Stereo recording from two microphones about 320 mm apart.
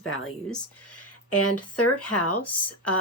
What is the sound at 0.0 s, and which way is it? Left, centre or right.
Speech, left.